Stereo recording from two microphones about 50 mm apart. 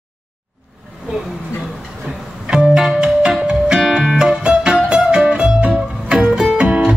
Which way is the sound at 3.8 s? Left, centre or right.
Centre.